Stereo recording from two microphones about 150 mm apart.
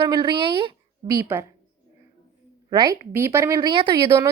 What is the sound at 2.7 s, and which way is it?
A woman's voice, 25° right (ahead or behind).